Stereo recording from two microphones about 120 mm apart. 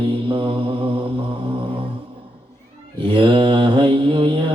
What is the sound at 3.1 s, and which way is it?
Mantra, 45° right (ahead or behind).